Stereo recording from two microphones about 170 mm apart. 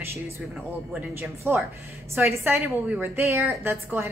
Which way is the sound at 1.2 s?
15° right (ahead or behind).